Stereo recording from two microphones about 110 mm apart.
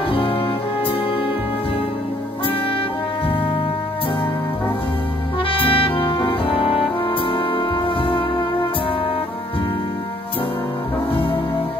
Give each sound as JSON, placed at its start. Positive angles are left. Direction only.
{"t": 0.1, "sound": "music", "side_deg": 55}
{"t": 5.5, "sound": "saxophone", "side_deg": 50}
{"t": 7.1, "sound": "music", "side_deg": 50}